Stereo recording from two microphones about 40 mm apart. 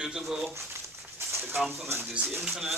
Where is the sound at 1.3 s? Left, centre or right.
Right.